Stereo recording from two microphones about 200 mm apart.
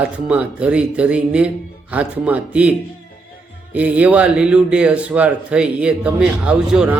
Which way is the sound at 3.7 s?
5° right (ahead or behind).